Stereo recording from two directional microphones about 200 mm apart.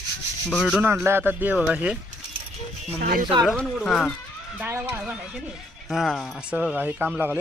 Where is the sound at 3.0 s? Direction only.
45° right (ahead or behind).